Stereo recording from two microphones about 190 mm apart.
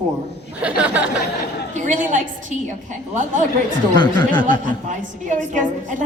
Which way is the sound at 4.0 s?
25° left (ahead or behind).